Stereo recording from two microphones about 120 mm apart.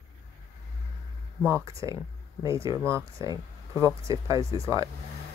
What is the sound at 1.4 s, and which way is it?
Speech, 25° right (ahead or behind).